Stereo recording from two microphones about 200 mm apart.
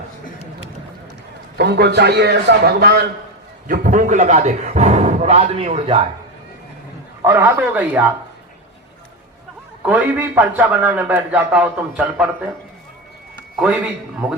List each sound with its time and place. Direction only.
1.5 s a man's voice: 55° right (ahead or behind)
3.7 s speech: 40° right (ahead or behind)
7.3 s a man's voice: 10° right (ahead or behind)
9.8 s a man's voice: 10° right (ahead or behind)
13.6 s a man's voice: 5° right (ahead or behind)